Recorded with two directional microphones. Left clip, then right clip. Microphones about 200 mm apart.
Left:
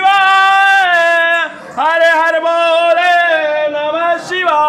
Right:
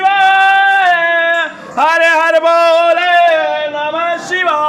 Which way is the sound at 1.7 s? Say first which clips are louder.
Right 1 dB; 30° right (ahead or behind).